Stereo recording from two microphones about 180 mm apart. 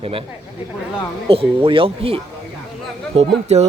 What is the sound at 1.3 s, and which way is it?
A man's voice, 30° right (ahead or behind).